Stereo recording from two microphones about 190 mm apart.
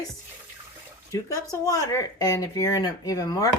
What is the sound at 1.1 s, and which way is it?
Speech, 15° left (ahead or behind).